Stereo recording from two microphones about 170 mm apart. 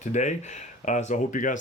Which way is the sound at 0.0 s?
45° left (ahead or behind).